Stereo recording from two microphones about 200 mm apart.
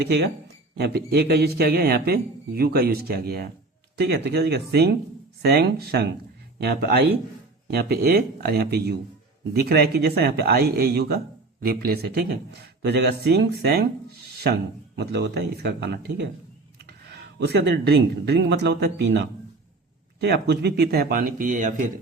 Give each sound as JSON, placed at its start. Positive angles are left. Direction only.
{"t": 0.0, "sound": "a man's voice", "side_deg": -55}
{"t": 17.5, "sound": "speech", "side_deg": -55}
{"t": 20.2, "sound": "a man's voice", "side_deg": -55}